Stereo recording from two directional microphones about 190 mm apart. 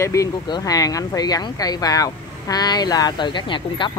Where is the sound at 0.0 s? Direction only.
15° left (ahead or behind).